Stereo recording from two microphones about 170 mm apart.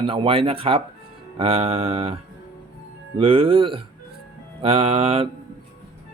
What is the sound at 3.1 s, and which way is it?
Speech, 30° right (ahead or behind).